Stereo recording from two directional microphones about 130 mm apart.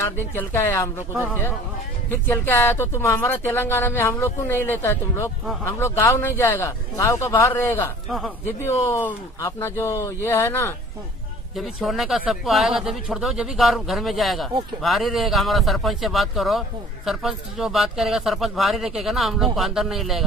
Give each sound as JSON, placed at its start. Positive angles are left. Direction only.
{"t": 0.3, "sound": "a woman's voice", "side_deg": 15}
{"t": 2.0, "sound": "speech", "side_deg": 15}
{"t": 8.9, "sound": "speech", "side_deg": 20}
{"t": 11.5, "sound": "speech", "side_deg": 0}